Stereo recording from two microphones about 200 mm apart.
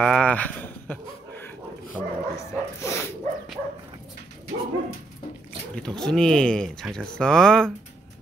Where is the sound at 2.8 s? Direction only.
15° left (ahead or behind).